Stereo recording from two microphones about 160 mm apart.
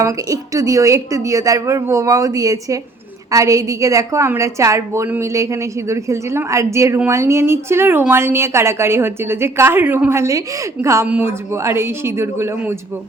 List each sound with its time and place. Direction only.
0.0 s a woman's voice: 20° right (ahead or behind)